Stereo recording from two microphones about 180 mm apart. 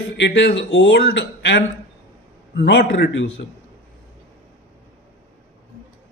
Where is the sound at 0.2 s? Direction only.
75° left (ahead or behind).